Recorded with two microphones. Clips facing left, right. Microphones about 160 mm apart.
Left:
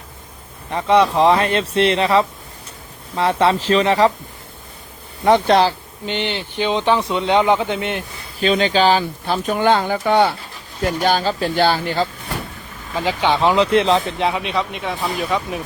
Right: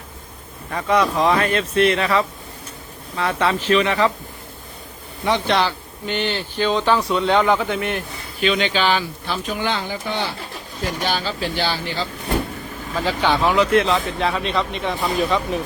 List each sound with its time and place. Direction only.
0.7 s speech: 25° left (ahead or behind)
5.2 s speech: 45° left (ahead or behind)
5.6 s speech: 25° left (ahead or behind)
8.4 s speech: 35° left (ahead or behind); by 10.3 s 65° left (ahead or behind)
11.0 s speech: 45° left (ahead or behind)
13.1 s speech: 20° left (ahead or behind); by 15.4 s 5° left (ahead or behind)